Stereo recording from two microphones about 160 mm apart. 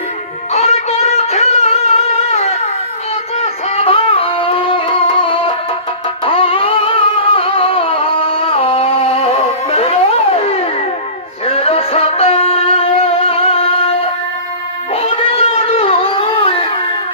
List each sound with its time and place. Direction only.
0.5 s a sound: 40° left (ahead or behind)
3.3 s music: 40° left (ahead or behind)
14.9 s cat: 35° left (ahead or behind)